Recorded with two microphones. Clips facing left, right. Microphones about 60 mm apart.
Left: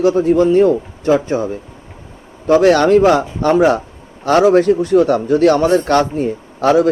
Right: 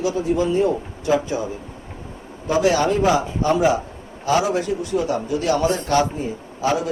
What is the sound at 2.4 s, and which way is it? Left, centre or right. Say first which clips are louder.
A man's voice: left 8 dB; left.